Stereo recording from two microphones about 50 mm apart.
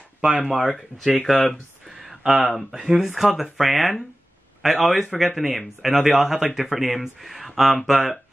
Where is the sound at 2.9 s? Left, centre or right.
Centre.